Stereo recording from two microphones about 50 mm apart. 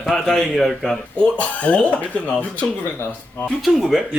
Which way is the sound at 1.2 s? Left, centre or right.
Left.